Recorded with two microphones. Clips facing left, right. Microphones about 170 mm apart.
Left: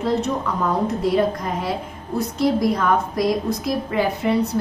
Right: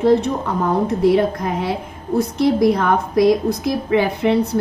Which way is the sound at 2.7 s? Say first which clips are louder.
Right 3 dB; 65° right (ahead or behind).